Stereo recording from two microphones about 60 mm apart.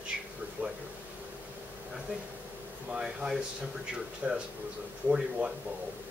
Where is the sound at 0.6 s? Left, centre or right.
Right.